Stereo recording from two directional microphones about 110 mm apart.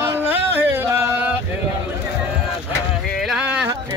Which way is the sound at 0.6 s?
20° right (ahead or behind).